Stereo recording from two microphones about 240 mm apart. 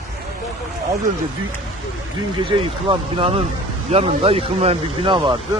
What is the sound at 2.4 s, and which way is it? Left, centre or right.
Speech, right.